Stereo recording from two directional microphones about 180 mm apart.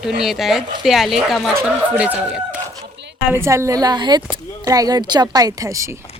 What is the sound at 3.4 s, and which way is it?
Speech, 15° right (ahead or behind).